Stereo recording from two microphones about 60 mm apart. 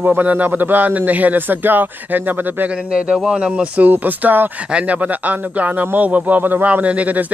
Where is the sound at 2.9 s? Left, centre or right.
Centre.